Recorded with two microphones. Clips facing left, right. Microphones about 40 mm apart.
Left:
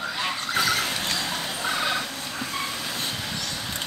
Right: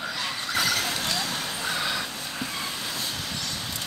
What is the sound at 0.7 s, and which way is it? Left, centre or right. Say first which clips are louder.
Vehicle: left 2 dB; left.